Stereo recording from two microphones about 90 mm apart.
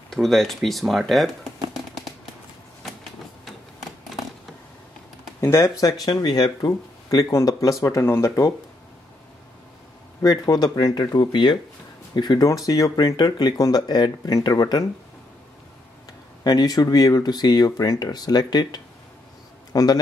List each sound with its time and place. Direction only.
0.1 s speech: 5° left (ahead or behind)
2.8 s a sound: centre (ahead or behind)
5.4 s speech: 30° left (ahead or behind)
6.0 s speech: 50° left (ahead or behind); by 8.5 s 30° left (ahead or behind)
10.2 s speech: 45° left (ahead or behind)
11.1 s speech: 60° left (ahead or behind)
12.4 s speech: 40° left (ahead or behind)
16.4 s a man's voice: 50° left (ahead or behind)